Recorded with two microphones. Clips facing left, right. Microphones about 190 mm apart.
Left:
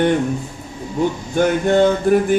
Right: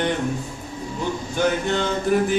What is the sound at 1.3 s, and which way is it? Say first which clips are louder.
Speech: left 6 dB; 50° left (ahead or behind).